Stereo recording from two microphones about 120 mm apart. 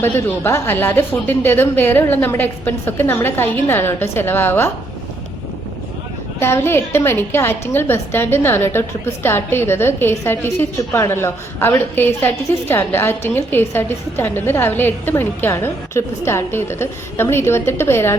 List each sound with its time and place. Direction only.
0.0 s a woman's voice: 20° left (ahead or behind)
6.4 s a woman's voice: 20° left (ahead or behind)